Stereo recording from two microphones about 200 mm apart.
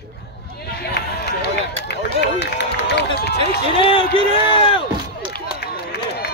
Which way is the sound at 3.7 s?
25° left (ahead or behind).